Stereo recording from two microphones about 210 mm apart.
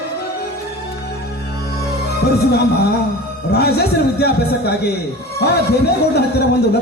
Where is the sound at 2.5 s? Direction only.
50° left (ahead or behind).